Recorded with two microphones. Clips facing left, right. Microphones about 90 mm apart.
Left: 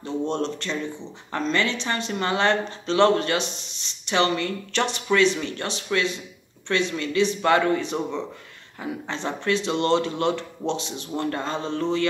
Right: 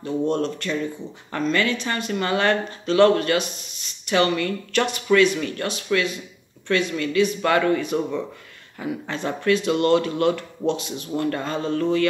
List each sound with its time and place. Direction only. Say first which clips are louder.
0.0 s speech: right 3 dB; 25° left (ahead or behind)